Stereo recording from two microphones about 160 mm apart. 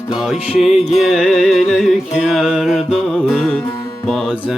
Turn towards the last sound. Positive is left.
turn(degrees=0)  # may be behind; listen again after turning